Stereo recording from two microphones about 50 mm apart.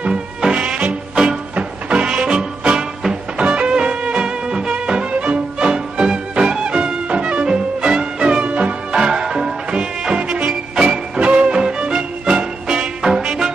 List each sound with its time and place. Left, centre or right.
0.0 s music: centre
9.0 s music: centre